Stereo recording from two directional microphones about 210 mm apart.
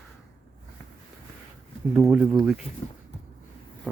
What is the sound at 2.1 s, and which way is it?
Speech, 5° right (ahead or behind).